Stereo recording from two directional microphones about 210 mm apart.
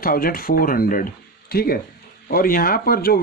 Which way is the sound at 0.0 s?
45° left (ahead or behind).